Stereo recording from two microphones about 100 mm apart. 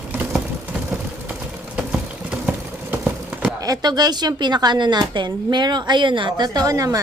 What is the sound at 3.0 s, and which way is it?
Clip-clop, 5° right (ahead or behind).